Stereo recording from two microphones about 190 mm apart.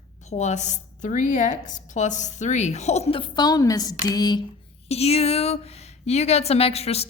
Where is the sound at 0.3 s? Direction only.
35° left (ahead or behind); by 4.4 s 20° left (ahead or behind).